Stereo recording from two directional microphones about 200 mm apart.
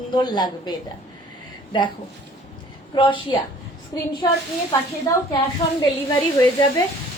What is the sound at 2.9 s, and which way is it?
A woman's voice, 25° left (ahead or behind).